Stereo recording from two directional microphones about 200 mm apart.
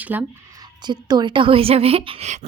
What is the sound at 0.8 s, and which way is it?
A woman's voice, 20° right (ahead or behind).